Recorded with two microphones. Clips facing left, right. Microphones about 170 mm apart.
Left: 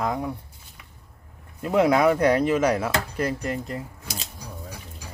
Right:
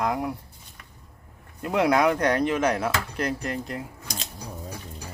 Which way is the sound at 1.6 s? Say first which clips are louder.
Left 2 dB; 5° left (ahead or behind).